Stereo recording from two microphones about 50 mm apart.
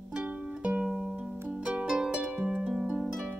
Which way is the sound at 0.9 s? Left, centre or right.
Centre.